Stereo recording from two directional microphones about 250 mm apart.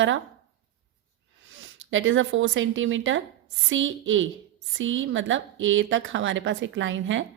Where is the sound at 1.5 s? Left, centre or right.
Right.